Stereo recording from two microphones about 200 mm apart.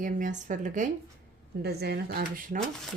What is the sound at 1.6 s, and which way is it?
Speech, 55° right (ahead or behind).